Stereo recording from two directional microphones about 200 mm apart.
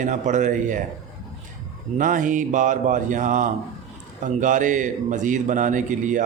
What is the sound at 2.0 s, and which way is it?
A man's voice, 40° right (ahead or behind).